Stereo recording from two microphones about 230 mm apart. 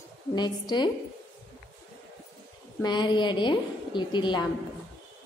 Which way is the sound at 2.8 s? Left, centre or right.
Centre.